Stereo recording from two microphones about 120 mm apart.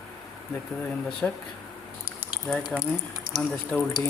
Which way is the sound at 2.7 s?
10° left (ahead or behind).